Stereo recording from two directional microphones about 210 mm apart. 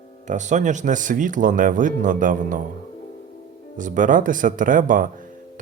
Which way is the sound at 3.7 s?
40° right (ahead or behind).